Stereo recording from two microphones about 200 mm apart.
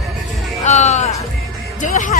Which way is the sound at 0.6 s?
35° left (ahead or behind).